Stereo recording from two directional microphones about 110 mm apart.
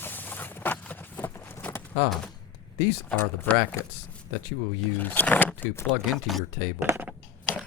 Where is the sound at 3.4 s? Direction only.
20° left (ahead or behind).